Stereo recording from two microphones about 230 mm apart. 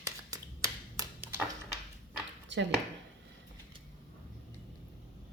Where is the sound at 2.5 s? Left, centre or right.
Right.